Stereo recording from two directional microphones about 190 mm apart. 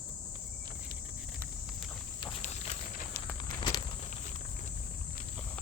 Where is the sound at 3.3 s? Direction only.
20° left (ahead or behind).